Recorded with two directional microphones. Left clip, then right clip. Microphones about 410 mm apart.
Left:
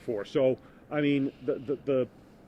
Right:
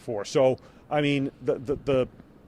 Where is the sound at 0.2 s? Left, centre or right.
Right.